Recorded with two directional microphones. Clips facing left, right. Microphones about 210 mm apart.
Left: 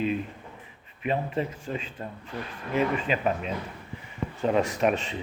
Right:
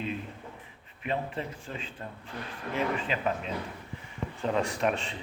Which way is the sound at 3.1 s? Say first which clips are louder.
Left 5 dB; 15° left (ahead or behind).